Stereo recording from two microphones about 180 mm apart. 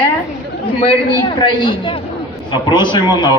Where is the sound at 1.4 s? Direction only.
25° left (ahead or behind).